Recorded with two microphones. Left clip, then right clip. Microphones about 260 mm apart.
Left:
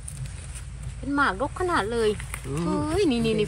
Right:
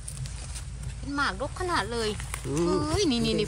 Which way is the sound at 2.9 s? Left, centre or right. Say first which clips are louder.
Left 3 dB; centre.